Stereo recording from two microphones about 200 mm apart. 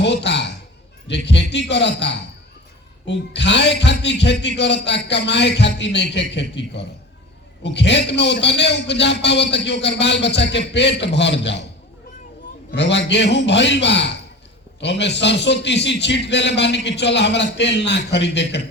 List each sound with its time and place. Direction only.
0.0 s a man's voice: 60° left (ahead or behind)
12.7 s a man's voice: 60° left (ahead or behind)